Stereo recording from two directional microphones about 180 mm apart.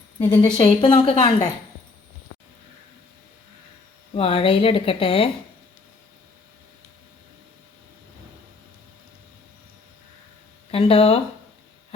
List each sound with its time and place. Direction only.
0.3 s a woman's voice: 30° left (ahead or behind)
4.1 s speech: 30° left (ahead or behind)
10.7 s speech: 35° left (ahead or behind)